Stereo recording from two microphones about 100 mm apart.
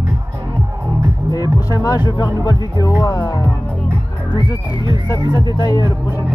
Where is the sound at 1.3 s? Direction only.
40° left (ahead or behind).